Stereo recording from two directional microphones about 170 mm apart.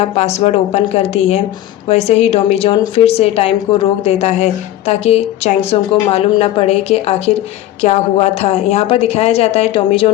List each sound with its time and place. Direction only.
0.0 s a woman's voice: 40° left (ahead or behind)